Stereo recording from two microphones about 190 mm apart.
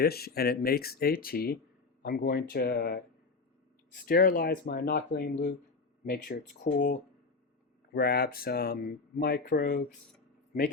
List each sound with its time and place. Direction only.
0.0 s speech: 55° left (ahead or behind)
4.0 s speech: 45° left (ahead or behind)
7.9 s speech: 50° left (ahead or behind)